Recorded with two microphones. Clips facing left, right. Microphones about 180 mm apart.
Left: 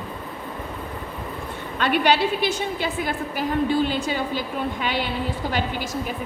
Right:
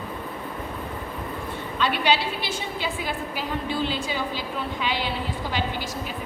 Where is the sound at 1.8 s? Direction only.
55° left (ahead or behind).